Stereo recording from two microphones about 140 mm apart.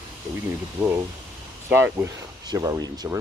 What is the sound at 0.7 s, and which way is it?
Speech, 20° right (ahead or behind).